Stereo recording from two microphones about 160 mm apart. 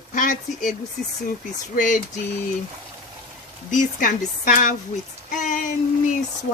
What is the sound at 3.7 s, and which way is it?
Speech, 55° left (ahead or behind).